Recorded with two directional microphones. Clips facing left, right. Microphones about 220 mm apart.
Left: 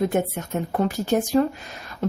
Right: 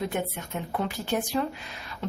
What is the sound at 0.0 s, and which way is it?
Speech, 45° left (ahead or behind).